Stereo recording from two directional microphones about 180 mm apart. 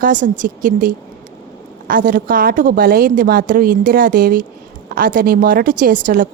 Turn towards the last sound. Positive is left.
turn(degrees=-50)  # may be behind; listen again after turning